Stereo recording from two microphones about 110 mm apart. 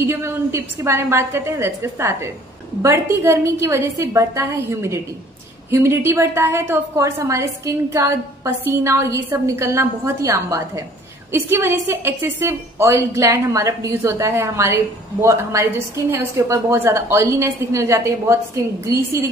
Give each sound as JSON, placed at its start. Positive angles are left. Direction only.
{"t": 0.0, "sound": "a woman's voice", "side_deg": -25}